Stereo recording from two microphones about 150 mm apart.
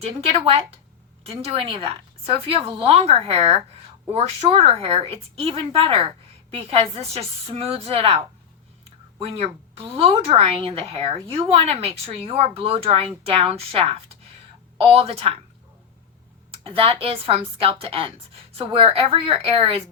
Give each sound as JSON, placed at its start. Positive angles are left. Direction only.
{"t": 0.0, "sound": "a woman's voice", "side_deg": -40}
{"t": 16.6, "sound": "a woman's voice", "side_deg": -40}